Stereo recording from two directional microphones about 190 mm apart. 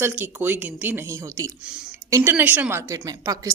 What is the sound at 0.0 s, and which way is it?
Speech, 10° right (ahead or behind).